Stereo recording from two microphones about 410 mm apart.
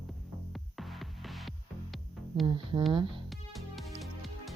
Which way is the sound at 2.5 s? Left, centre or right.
Centre.